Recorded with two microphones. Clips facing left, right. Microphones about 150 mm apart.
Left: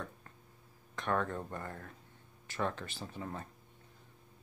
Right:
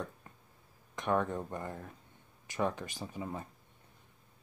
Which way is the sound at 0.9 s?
15° right (ahead or behind).